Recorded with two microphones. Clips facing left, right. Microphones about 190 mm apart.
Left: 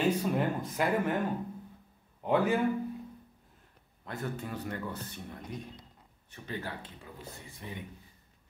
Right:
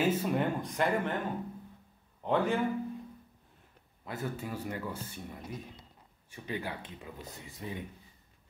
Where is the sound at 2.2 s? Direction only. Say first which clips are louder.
Left 2 dB; 10° left (ahead or behind).